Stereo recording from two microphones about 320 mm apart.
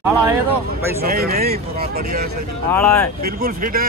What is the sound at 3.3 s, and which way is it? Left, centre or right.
Speech, right.